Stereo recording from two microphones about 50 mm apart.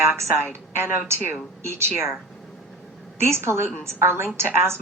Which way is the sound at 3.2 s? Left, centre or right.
Right.